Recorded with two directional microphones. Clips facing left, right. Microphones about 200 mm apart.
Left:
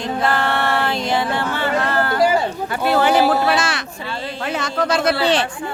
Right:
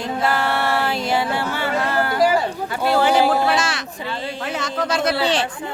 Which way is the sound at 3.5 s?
60° left (ahead or behind).